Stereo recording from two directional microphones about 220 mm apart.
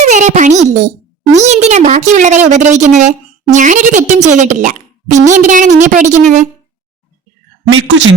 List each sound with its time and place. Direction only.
0.0 s a child's voice: 35° right (ahead or behind)
7.7 s speech: 60° right (ahead or behind)